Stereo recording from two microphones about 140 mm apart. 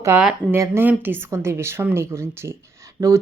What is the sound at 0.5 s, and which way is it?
A woman's voice, 20° right (ahead or behind).